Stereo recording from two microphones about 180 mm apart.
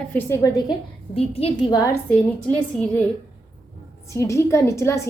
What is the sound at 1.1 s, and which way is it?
Speech, 35° left (ahead or behind).